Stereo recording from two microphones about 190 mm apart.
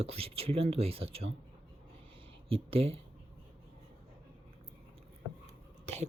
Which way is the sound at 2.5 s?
30° right (ahead or behind).